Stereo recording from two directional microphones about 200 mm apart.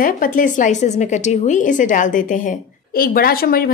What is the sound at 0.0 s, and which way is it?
A woman's voice, 45° left (ahead or behind).